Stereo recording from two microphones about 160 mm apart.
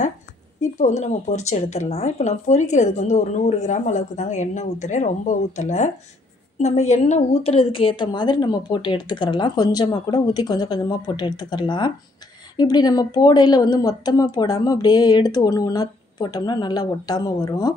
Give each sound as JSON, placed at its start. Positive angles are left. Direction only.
{"t": 0.6, "sound": "a woman's voice", "side_deg": 50}